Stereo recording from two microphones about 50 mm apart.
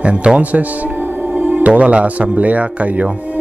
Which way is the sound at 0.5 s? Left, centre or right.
Right.